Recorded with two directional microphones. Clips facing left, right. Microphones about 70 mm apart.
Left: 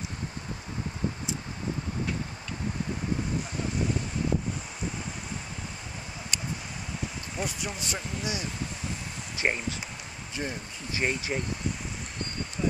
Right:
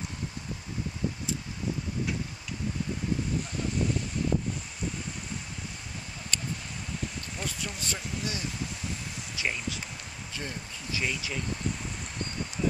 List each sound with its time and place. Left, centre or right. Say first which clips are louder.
6.3 s a sound: right 1 dB; centre
7.3 s speech: left 5 dB; centre
9.4 s speech: left 4 dB; left
10.3 s speech: left 4 dB; left
11.0 s speech: left 4 dB; left